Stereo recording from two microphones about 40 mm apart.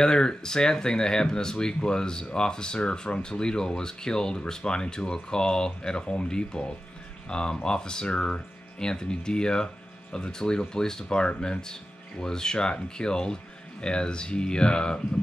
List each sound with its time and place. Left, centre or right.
0.0 s speech: centre